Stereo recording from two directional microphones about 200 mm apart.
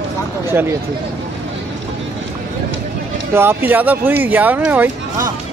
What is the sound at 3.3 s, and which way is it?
Speech, 10° right (ahead or behind).